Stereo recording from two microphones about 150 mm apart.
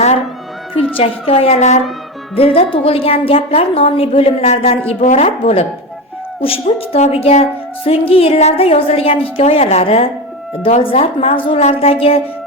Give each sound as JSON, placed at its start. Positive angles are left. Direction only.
{"t": 0.9, "sound": "a woman's voice", "side_deg": 40}
{"t": 4.9, "sound": "speech", "side_deg": 55}
{"t": 5.4, "sound": "a woman's voice", "side_deg": 40}